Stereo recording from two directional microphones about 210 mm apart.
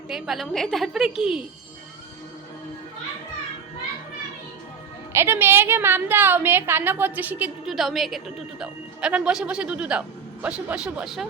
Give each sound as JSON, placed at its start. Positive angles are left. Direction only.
{"t": 0.1, "sound": "a woman's voice", "side_deg": 0}
{"t": 5.1, "sound": "a woman's voice", "side_deg": -10}